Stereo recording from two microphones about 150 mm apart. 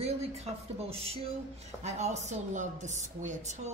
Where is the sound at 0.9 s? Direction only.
40° right (ahead or behind).